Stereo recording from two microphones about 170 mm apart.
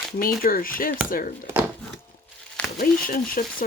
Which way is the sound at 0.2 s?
55° left (ahead or behind).